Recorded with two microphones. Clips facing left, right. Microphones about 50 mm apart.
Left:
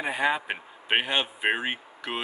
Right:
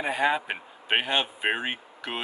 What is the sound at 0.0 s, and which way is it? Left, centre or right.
Speech, centre.